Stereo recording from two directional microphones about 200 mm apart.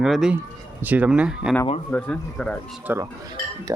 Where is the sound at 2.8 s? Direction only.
10° right (ahead or behind).